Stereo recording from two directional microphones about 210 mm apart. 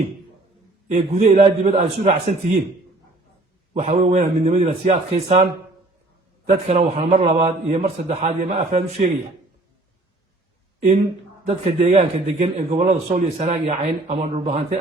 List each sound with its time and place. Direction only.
0.9 s a man's voice: 35° right (ahead or behind)
3.8 s a man's voice: 30° right (ahead or behind)
6.7 s a man's voice: 30° right (ahead or behind)
11.4 s a man's voice: 30° right (ahead or behind)